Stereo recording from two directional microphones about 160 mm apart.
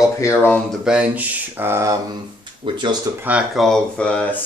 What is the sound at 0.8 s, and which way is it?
Speech, 5° right (ahead or behind).